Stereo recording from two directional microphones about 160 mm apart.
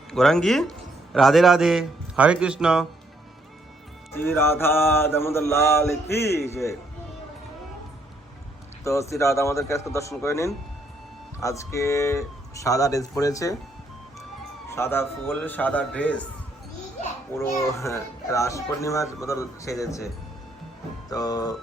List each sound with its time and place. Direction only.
0.1 s a man's voice: 5° left (ahead or behind)
4.2 s mantra: 15° left (ahead or behind)
8.8 s mantra: 20° left (ahead or behind)
11.3 s a man's voice: 20° left (ahead or behind)
14.7 s mantra: 15° left (ahead or behind)
17.3 s mantra: 15° left (ahead or behind)
17.7 s a man's voice: 20° left (ahead or behind)
21.1 s a man's voice: 25° left (ahead or behind)